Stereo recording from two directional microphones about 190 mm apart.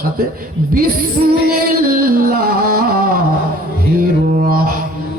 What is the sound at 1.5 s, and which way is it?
Music, 50° right (ahead or behind).